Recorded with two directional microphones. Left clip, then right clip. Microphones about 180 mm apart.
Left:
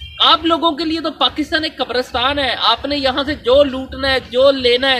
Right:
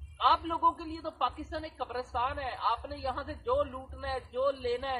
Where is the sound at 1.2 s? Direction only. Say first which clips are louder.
Left 16 dB; 15° left (ahead or behind).